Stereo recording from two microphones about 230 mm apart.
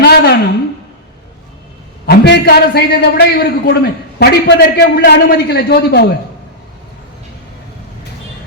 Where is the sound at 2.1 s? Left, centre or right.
Left.